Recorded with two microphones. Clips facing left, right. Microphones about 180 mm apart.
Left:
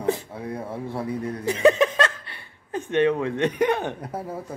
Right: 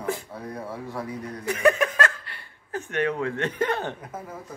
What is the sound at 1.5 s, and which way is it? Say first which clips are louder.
Chuckle: left 3 dB; 25° left (ahead or behind).